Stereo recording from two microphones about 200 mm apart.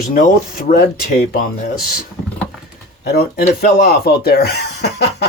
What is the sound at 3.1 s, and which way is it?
Speech, 50° left (ahead or behind).